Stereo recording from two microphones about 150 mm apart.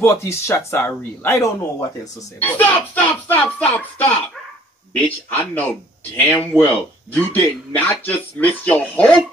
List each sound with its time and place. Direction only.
0.0 s a man's voice: 20° left (ahead or behind)
5.3 s speech: 10° left (ahead or behind)